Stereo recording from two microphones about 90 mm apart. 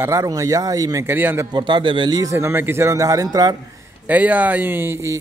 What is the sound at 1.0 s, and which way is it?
Speech, 25° right (ahead or behind).